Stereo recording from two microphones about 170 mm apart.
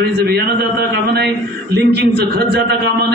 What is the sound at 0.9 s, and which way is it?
A man's voice, 70° right (ahead or behind).